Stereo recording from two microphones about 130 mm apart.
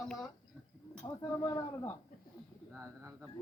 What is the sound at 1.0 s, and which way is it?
Speech, 30° left (ahead or behind).